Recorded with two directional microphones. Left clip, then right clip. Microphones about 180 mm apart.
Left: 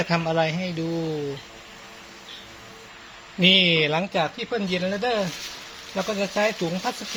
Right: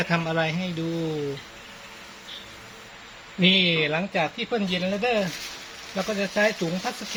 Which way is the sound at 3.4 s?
30° left (ahead or behind).